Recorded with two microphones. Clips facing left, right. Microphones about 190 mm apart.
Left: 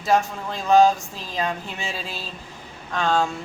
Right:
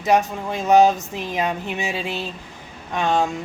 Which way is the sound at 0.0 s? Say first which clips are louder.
Right 2 dB; 20° right (ahead or behind).